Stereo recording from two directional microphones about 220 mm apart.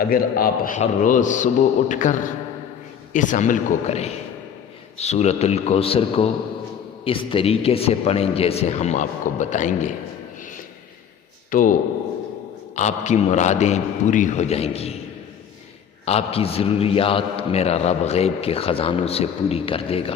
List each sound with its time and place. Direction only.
0.0 s a man's voice: 40° left (ahead or behind)
11.5 s a man's voice: 35° left (ahead or behind)
16.0 s a man's voice: 25° left (ahead or behind)